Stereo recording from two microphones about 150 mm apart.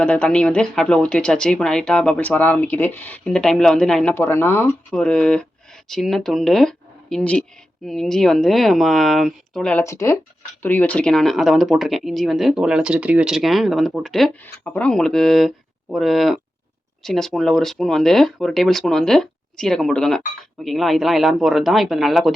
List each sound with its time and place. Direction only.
0.0 s speech: 5° left (ahead or behind)
4.1 s speech: 15° left (ahead or behind)
9.8 s speech: 20° left (ahead or behind); by 22.3 s centre (ahead or behind)